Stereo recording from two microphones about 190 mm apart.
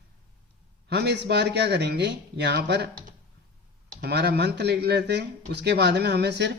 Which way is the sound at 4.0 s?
60° right (ahead or behind).